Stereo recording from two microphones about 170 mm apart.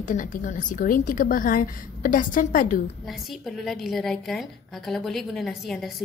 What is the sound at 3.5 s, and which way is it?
A woman's voice, centre (ahead or behind).